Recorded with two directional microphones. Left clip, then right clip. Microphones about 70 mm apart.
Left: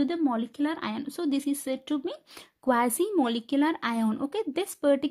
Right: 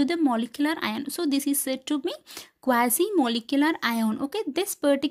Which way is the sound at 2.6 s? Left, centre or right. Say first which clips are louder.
Right 2 dB; centre.